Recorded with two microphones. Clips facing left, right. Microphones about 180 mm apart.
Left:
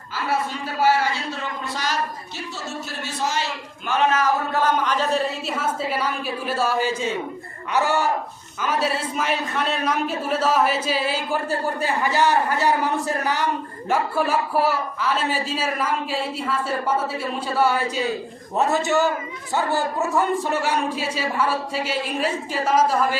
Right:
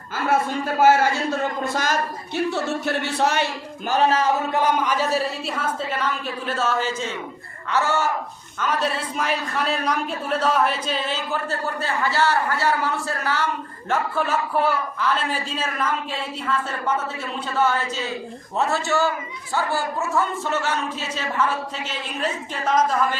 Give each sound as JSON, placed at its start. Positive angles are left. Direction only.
{"t": 0.3, "sound": "a man's voice", "side_deg": -50}
{"t": 3.8, "sound": "speech", "side_deg": -35}
{"t": 4.5, "sound": "a woman's voice", "side_deg": -10}
{"t": 9.1, "sound": "a woman's voice", "side_deg": 0}